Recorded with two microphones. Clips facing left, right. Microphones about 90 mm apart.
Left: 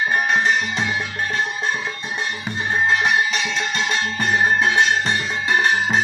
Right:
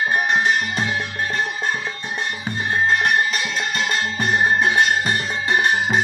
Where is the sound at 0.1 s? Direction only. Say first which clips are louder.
Even; 5° right (ahead or behind).